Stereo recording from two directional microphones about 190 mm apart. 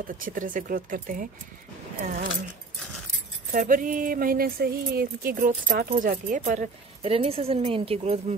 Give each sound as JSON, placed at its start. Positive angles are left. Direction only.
{"t": 0.0, "sound": "speech", "side_deg": -45}
{"t": 3.5, "sound": "speech", "side_deg": -45}